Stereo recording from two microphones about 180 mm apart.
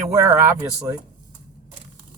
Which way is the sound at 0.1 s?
20° right (ahead or behind).